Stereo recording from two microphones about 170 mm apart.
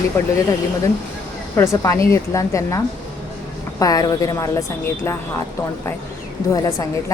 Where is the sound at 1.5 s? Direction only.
15° left (ahead or behind).